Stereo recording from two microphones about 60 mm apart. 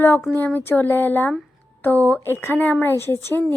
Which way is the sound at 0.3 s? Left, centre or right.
Left.